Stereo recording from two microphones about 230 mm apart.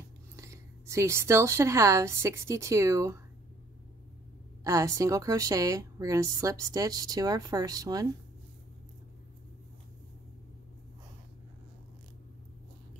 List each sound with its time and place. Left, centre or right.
0.4 s a woman's voice: centre
4.6 s a woman's voice: centre